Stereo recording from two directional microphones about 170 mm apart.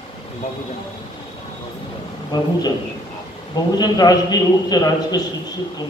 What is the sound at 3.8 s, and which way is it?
A man's voice, 25° left (ahead or behind).